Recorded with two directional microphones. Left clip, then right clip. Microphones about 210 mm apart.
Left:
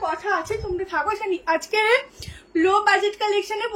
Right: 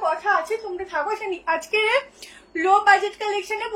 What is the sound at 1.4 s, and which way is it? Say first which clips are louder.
A woman's voice: even; 30° left (ahead or behind).